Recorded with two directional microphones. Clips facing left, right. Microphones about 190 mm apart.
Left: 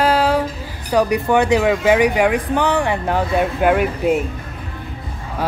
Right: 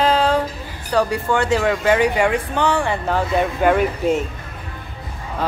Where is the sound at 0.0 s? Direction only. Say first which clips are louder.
Left 1 dB; 10° left (ahead or behind).